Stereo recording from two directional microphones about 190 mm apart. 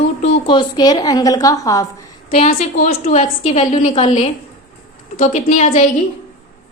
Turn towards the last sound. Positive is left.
turn(degrees=40)  # may be behind; listen again after turning